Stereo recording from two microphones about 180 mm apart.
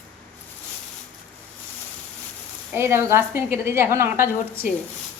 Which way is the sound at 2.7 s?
15° right (ahead or behind).